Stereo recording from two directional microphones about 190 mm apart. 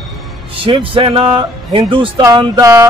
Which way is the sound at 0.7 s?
25° right (ahead or behind).